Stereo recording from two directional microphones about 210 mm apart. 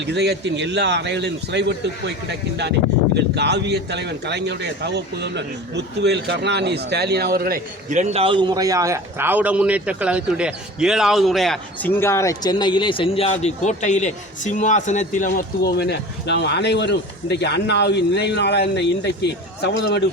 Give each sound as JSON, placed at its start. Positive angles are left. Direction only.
{"t": 0.0, "sound": "speech", "side_deg": -55}
{"t": 3.2, "sound": "speech", "side_deg": -55}